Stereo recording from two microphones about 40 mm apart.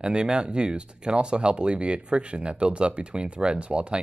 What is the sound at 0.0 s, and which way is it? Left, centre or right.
Speech, right.